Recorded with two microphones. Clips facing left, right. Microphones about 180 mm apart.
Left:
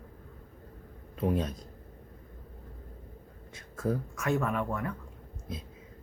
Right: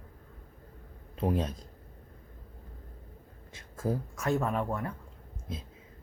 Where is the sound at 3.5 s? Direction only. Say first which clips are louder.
Left 1 dB; 30° right (ahead or behind).